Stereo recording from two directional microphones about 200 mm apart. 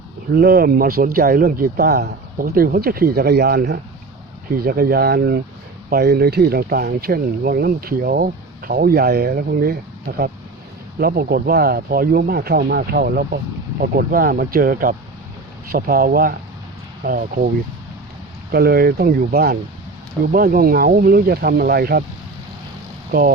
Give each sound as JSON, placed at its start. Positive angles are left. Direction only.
{"t": 0.3, "sound": "speech", "side_deg": -50}
{"t": 18.5, "sound": "speech", "side_deg": -50}